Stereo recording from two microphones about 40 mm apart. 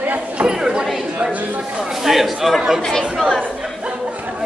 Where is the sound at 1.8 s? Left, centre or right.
Centre.